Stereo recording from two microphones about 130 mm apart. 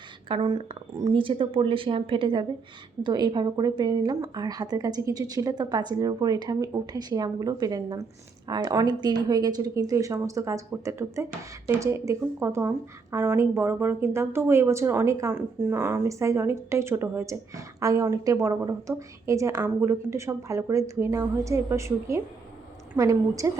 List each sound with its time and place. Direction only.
0.3 s a woman's voice: 40° right (ahead or behind)